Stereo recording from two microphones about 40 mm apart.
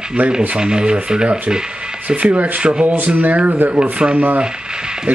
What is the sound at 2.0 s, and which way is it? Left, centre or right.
Speech, right.